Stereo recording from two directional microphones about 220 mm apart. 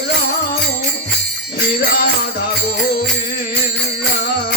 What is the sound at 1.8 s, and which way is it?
Music, 45° left (ahead or behind).